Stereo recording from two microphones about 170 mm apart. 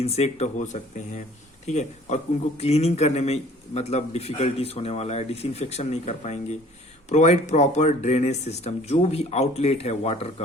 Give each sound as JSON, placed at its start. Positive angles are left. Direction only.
{"t": 0.0, "sound": "a man's voice", "side_deg": 40}